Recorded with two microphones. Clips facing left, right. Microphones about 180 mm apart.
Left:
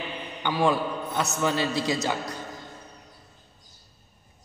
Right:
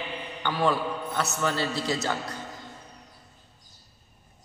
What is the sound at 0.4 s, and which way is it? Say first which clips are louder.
A man's voice: left 2 dB; 15° left (ahead or behind).